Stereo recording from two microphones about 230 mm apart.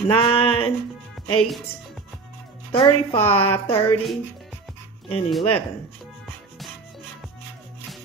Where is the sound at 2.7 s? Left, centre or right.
Left.